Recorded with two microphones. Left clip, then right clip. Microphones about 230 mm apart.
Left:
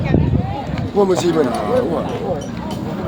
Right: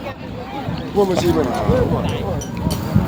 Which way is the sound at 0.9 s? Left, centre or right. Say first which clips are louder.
Left 2 dB; left.